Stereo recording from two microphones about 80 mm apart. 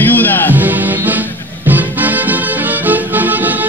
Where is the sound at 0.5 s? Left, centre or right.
Right.